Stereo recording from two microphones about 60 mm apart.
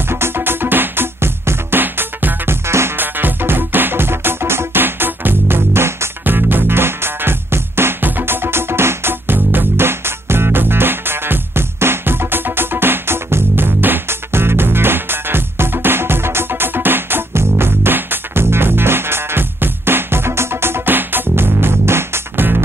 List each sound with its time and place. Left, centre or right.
0.1 s music: right
6.2 s music: right